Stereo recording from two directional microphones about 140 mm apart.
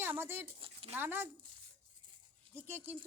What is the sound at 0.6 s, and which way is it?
Speech, 40° right (ahead or behind).